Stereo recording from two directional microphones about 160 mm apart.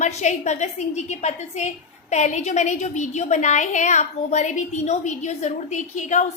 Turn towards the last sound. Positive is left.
turn(degrees=50)  # may be behind; listen again after turning